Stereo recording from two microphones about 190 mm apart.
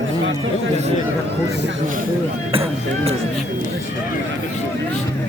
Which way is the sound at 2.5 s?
30° right (ahead or behind).